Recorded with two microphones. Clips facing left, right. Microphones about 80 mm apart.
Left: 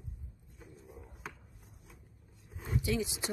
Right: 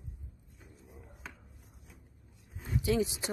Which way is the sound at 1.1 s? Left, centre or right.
Centre.